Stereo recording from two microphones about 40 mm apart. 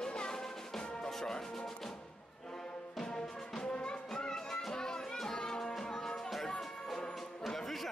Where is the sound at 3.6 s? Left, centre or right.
Left.